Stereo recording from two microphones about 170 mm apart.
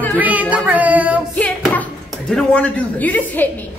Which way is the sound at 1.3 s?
10° left (ahead or behind).